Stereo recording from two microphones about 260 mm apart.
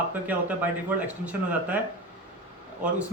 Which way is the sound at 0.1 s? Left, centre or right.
Centre.